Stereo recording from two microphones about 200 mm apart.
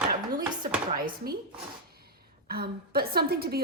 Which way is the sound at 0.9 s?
45° right (ahead or behind).